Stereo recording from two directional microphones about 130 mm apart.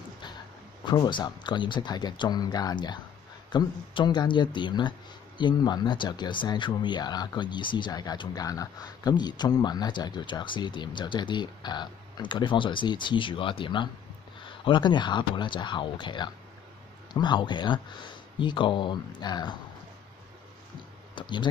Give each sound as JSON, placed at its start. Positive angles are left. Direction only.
{"t": 0.8, "sound": "speech", "side_deg": 35}
{"t": 21.1, "sound": "speech", "side_deg": 35}